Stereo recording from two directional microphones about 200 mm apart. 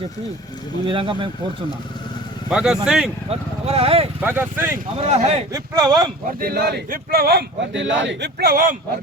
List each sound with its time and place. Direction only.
0.9 s speech: 25° right (ahead or behind)
2.5 s speech: 5° right (ahead or behind)
3.2 s speech: 30° right (ahead or behind)
4.2 s speech: 10° right (ahead or behind)
4.9 s speech: 35° right (ahead or behind)
5.5 s speech: 15° right (ahead or behind)
6.4 s speech: 50° right (ahead or behind)